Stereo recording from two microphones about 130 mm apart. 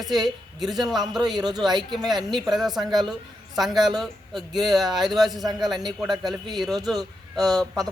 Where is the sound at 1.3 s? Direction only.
30° right (ahead or behind).